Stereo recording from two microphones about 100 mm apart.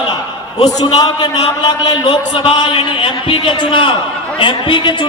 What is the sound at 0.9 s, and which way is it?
A man's voice, 45° left (ahead or behind).